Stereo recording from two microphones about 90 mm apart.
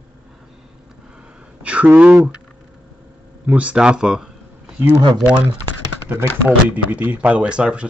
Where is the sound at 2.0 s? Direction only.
10° right (ahead or behind).